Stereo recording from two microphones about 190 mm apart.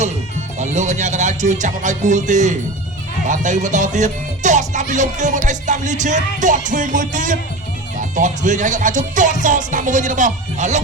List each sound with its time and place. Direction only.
0.6 s music: 35° right (ahead or behind)